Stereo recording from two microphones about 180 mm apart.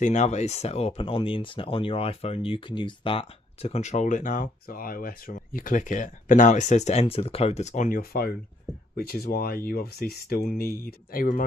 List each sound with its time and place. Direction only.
0.0 s speech: 40° left (ahead or behind)